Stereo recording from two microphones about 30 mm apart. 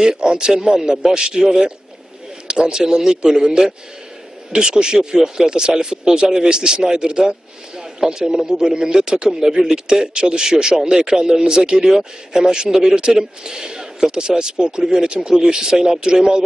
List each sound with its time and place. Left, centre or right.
0.0 s speech: right